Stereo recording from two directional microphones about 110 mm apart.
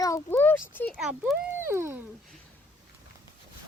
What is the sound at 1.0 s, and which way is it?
Speech, 5° right (ahead or behind).